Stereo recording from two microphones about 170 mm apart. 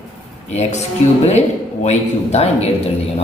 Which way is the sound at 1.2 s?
40° left (ahead or behind).